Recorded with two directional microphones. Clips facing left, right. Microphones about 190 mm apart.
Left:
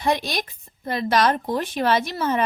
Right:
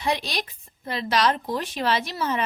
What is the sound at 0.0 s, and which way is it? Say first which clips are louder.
A woman's voice: left 3 dB; 50° left (ahead or behind).